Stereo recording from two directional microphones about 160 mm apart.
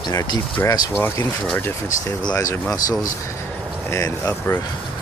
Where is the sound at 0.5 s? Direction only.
15° left (ahead or behind).